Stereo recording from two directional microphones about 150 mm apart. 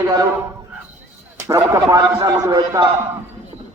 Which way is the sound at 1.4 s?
20° right (ahead or behind).